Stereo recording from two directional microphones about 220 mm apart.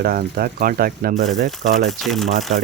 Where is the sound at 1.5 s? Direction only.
Centre (ahead or behind).